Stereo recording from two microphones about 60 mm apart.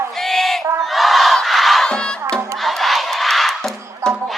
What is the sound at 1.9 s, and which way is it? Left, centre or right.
Music, centre.